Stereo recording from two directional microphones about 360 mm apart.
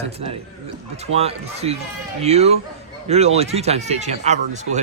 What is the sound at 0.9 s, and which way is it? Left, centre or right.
Speech, centre.